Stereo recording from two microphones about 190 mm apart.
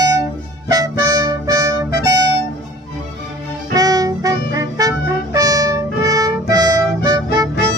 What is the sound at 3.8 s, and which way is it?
Music, 20° right (ahead or behind).